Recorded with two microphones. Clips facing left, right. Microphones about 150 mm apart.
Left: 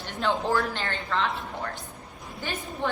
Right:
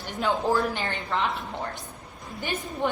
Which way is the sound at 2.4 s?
15° right (ahead or behind).